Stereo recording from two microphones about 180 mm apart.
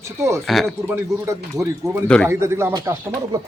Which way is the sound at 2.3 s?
15° right (ahead or behind).